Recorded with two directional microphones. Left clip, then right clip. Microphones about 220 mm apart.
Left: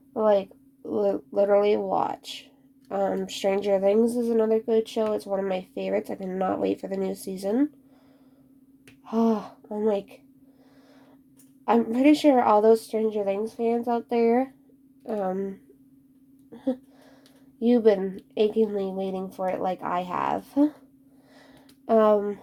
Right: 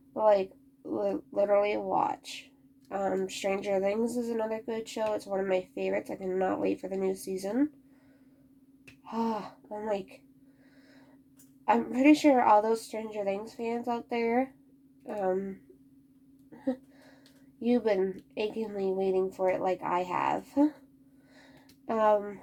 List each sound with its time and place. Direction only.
0.1 s a woman's voice: 45° left (ahead or behind)
9.0 s speech: 45° left (ahead or behind)
11.6 s speech: 40° left (ahead or behind)
17.6 s speech: 40° left (ahead or behind)
21.8 s speech: 40° left (ahead or behind)